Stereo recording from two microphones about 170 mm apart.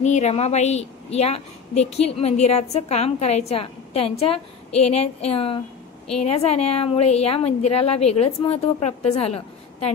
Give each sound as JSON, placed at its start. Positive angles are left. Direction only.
{"t": 0.0, "sound": "a woman's voice", "side_deg": 40}